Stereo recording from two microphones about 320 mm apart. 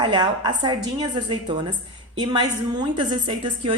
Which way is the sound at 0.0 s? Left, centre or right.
Centre.